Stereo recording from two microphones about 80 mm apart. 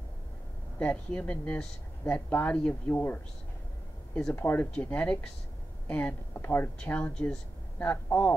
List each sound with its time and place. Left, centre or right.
0.7 s speech: centre
4.4 s speech: left